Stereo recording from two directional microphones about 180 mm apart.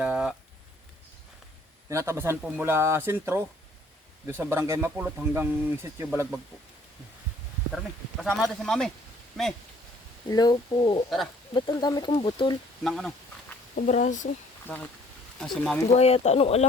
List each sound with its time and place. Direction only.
0.0 s a sound: 5° right (ahead or behind)
1.9 s speech: 15° right (ahead or behind)
8.2 s speech: centre (ahead or behind)
10.2 s speech: 20° left (ahead or behind)
12.8 s speech: centre (ahead or behind)
13.7 s speech: 45° left (ahead or behind)
14.7 s speech: 5° left (ahead or behind)
15.9 s speech: 35° left (ahead or behind)